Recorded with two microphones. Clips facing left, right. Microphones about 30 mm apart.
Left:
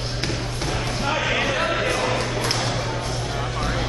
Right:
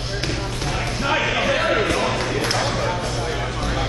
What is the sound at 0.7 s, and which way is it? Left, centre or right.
Music, centre.